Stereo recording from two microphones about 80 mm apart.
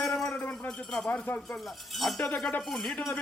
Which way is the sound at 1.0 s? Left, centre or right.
Centre.